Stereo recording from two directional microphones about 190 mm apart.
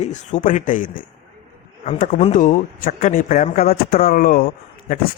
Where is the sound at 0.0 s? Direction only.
40° left (ahead or behind).